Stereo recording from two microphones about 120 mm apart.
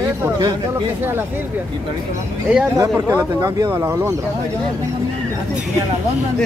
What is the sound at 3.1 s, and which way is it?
Speech, 30° right (ahead or behind).